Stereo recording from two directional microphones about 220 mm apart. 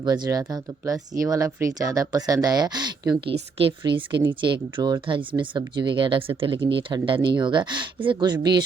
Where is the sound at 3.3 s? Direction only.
50° right (ahead or behind).